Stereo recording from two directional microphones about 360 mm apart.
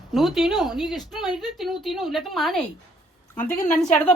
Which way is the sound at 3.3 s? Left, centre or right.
Left.